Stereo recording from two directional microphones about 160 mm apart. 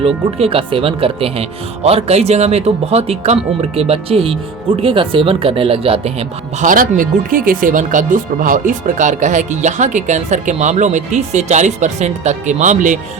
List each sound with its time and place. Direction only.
0.3 s speech: 35° right (ahead or behind)
6.7 s speech: 55° right (ahead or behind)